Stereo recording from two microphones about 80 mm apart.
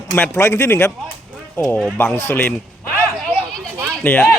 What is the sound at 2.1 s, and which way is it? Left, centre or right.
Speech, left.